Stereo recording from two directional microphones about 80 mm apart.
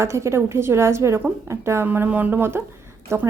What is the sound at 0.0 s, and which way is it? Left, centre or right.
A woman's voice, right.